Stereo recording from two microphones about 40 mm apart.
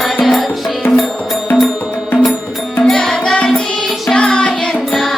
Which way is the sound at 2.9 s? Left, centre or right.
Centre.